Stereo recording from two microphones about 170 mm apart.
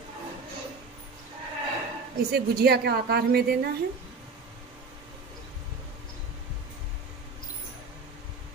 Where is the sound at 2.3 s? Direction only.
65° right (ahead or behind).